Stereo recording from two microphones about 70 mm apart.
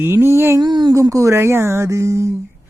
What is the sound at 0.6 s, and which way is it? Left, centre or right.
Speech, right.